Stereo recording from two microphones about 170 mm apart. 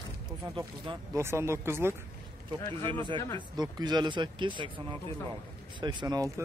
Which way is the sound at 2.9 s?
30° right (ahead or behind).